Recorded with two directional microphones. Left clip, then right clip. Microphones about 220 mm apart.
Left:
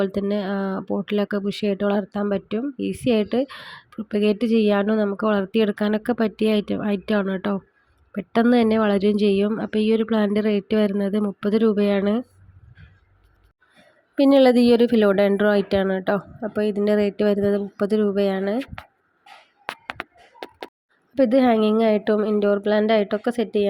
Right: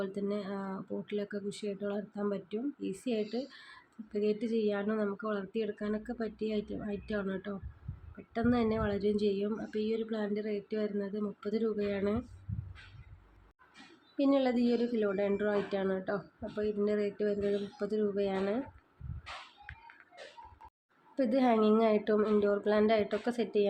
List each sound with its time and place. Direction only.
0.0 s speech: 35° left (ahead or behind)
14.2 s speech: 40° left (ahead or behind)
21.2 s speech: 35° left (ahead or behind)